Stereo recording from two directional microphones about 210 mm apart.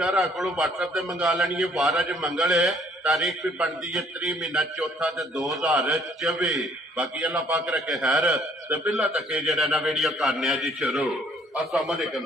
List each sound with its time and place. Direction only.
0.0 s a man's voice: centre (ahead or behind)